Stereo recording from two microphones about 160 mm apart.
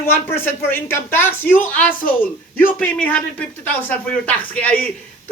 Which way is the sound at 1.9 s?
60° left (ahead or behind).